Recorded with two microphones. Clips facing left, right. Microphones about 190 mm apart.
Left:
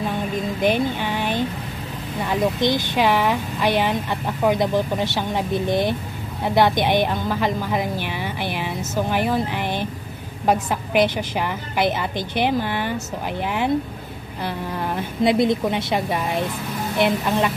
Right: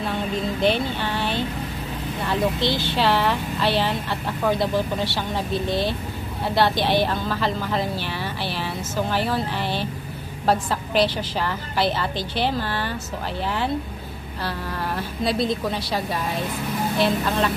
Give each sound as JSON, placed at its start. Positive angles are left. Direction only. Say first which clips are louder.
{"t": 0.1, "sound": "a woman's voice", "louder": "left 1 dB", "side_deg": 15}